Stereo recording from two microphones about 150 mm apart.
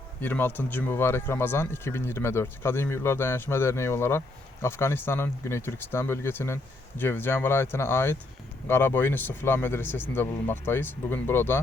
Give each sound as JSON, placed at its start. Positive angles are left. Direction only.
{"t": 0.2, "sound": "speech", "side_deg": 15}